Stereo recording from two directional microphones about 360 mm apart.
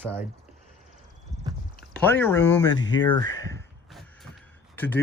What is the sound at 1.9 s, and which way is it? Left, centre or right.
Speech, centre.